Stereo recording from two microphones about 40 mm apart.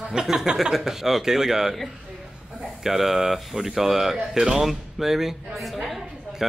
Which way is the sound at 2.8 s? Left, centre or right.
Centre.